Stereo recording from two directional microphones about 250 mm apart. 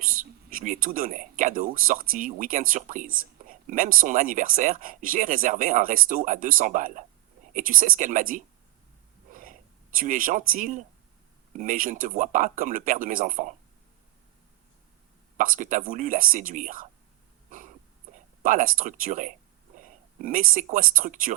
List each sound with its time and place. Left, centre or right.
0.0 s speech: right
9.3 s a sound: right
11.5 s speech: right
15.4 s speech: right
18.4 s speech: right